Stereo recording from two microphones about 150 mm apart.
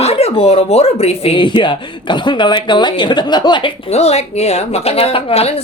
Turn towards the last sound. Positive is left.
turn(degrees=40)  # may be behind; listen again after turning